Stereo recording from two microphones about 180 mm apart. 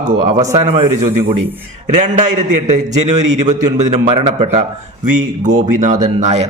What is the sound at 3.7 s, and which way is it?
Speech, 35° right (ahead or behind).